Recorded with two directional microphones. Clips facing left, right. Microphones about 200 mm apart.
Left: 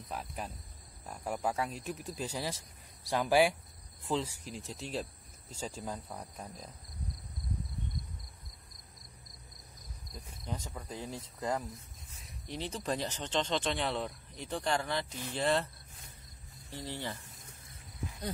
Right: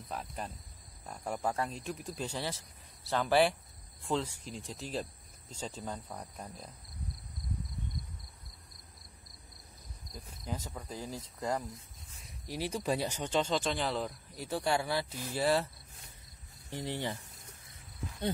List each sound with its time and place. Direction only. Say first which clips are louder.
0.1 s cricket: even; 5° left (ahead or behind)
1.0 s speech: even; 5° left (ahead or behind)
4.0 s cricket: even; 5° left (ahead or behind)
5.5 s speech: even; 10° left (ahead or behind)
6.0 s cricket: even; centre (ahead or behind)
10.1 s cricket: right 1 dB; 5° right (ahead or behind)
12.1 s speech: right 1 dB; centre (ahead or behind)
16.7 s speech: right 3 dB; 15° right (ahead or behind)